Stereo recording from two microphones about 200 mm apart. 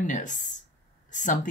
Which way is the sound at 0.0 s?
40° left (ahead or behind).